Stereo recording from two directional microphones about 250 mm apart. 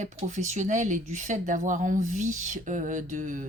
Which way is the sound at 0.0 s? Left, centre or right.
Right.